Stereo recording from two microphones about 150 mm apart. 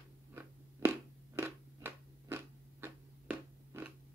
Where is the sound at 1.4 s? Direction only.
15° right (ahead or behind).